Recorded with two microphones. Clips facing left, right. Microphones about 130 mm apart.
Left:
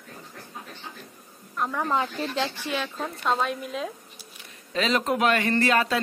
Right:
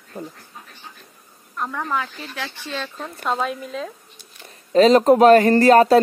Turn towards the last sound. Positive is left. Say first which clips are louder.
# right 11 dB
turn(degrees=-40)  # may be behind; listen again after turning